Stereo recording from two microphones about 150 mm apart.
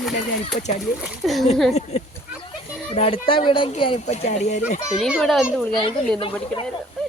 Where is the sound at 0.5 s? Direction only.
65° left (ahead or behind).